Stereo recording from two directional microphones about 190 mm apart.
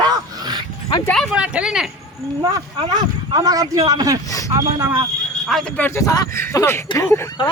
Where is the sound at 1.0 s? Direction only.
5° left (ahead or behind).